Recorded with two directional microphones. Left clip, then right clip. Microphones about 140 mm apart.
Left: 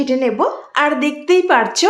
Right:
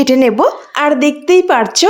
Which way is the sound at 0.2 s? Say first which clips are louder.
Right 6 dB; 90° right.